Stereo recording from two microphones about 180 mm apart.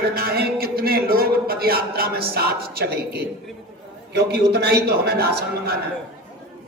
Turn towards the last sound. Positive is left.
turn(degrees=-60)  # may be behind; listen again after turning